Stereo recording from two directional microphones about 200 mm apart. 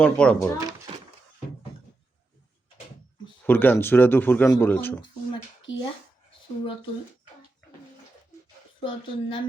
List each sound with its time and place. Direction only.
0.0 s speech: 5° left (ahead or behind)
3.4 s speech: 10° left (ahead or behind)
5.3 s a sound: 25° left (ahead or behind)
8.8 s speech: 25° left (ahead or behind)